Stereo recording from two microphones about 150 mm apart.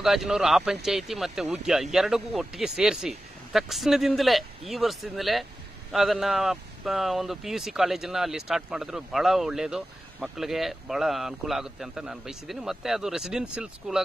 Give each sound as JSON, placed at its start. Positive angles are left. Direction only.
{"t": 0.0, "sound": "speech", "side_deg": 0}